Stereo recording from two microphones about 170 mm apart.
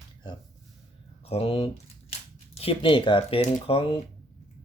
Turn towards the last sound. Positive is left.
turn(degrees=35)  # may be behind; listen again after turning